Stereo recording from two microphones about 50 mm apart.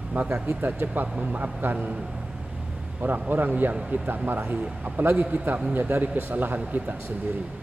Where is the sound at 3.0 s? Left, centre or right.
Right.